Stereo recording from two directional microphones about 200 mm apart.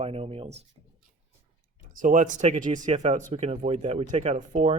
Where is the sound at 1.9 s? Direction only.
40° right (ahead or behind).